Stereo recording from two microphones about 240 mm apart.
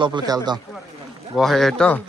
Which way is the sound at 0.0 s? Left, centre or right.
Centre.